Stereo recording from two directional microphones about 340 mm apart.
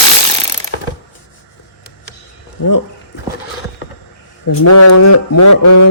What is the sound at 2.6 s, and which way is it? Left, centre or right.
Speech, left.